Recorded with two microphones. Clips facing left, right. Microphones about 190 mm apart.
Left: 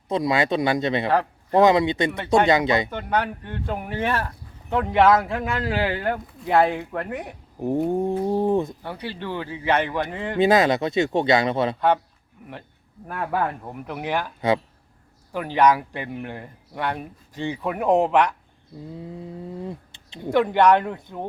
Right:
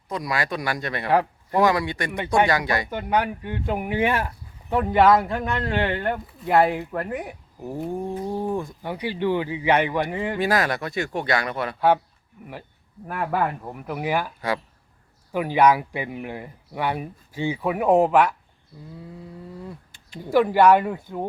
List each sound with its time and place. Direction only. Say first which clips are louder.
0.1 s speech: left 6 dB; 25° left (ahead or behind)
2.1 s speech: right 1 dB; 15° right (ahead or behind)
2.5 s speech: left 4 dB; 20° left (ahead or behind)
2.9 s speech: right 1 dB; 10° right (ahead or behind)
4.7 s speech: even; 5° right (ahead or behind)
7.9 s speech: left 6 dB; 20° left (ahead or behind)
8.1 s a sound: left 4 dB; 25° left (ahead or behind)
8.8 s speech: right 6 dB; 15° right (ahead or behind)
10.3 s speech: left 7 dB; 20° left (ahead or behind)
12.4 s speech: right 1 dB; 5° right (ahead or behind)
19.6 s a sound: left 5 dB; 25° left (ahead or behind)
20.3 s speech: right 1 dB; 5° right (ahead or behind)